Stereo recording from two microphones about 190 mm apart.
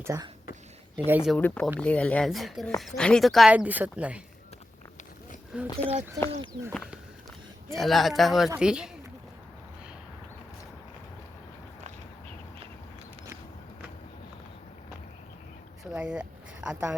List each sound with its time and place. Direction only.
0.0 s speech: 15° right (ahead or behind)
1.4 s speech: 10° left (ahead or behind)
5.5 s speech: 5° right (ahead or behind)
6.3 s speech: 25° right (ahead or behind)
7.7 s speech: centre (ahead or behind)
15.8 s a sound: 5° right (ahead or behind)